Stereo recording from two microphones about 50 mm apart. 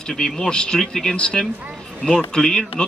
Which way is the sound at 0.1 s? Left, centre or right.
Centre.